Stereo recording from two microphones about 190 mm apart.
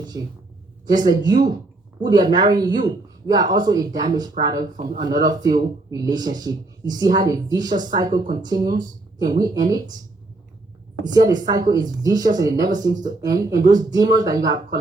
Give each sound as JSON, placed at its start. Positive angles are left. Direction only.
{"t": 1.0, "sound": "speech", "side_deg": -20}
{"t": 4.6, "sound": "a man's voice", "side_deg": -45}
{"t": 4.9, "sound": "speech", "side_deg": -20}
{"t": 8.8, "sound": "a sound", "side_deg": -20}
{"t": 9.4, "sound": "speech", "side_deg": -20}
{"t": 11.0, "sound": "speech", "side_deg": -20}